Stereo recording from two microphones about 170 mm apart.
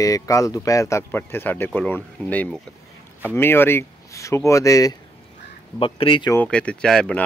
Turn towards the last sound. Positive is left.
turn(degrees=5)  # may be behind; listen again after turning